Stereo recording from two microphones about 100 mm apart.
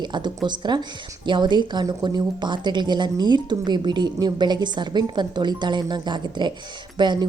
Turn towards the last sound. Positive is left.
turn(degrees=-50)  # may be behind; listen again after turning